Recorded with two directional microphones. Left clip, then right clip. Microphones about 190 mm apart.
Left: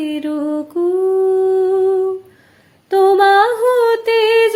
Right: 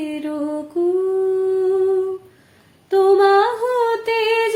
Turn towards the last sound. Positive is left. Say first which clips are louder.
# left 6 dB
turn(degrees=45)  # may be behind; listen again after turning